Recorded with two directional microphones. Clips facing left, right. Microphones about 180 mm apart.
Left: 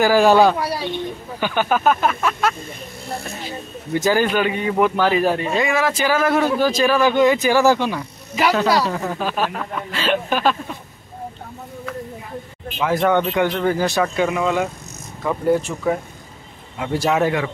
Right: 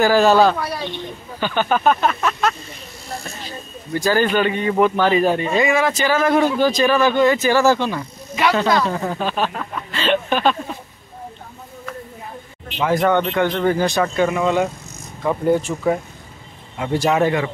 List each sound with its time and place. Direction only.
0.0 s speech: 10° left (ahead or behind)
13.0 s speech: 10° left (ahead or behind)
16.8 s speech: centre (ahead or behind)